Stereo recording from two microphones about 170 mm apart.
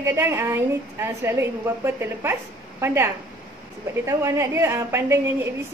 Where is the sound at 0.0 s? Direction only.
15° right (ahead or behind).